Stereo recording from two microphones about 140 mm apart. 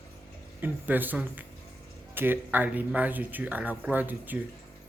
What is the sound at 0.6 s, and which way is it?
Speech, 15° right (ahead or behind).